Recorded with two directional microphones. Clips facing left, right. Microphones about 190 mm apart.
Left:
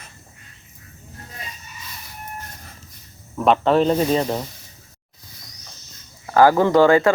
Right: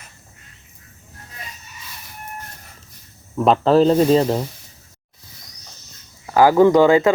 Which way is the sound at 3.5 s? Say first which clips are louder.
Right 3 dB; 35° right (ahead or behind).